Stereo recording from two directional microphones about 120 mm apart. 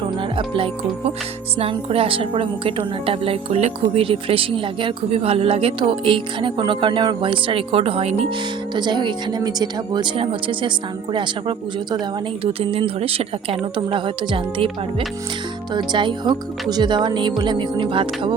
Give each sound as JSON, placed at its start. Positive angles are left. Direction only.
{"t": 0.2, "sound": "speech", "side_deg": -50}
{"t": 8.7, "sound": "speech", "side_deg": -40}
{"t": 12.4, "sound": "speech", "side_deg": -50}